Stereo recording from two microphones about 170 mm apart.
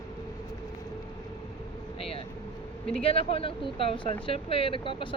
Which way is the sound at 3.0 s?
35° left (ahead or behind).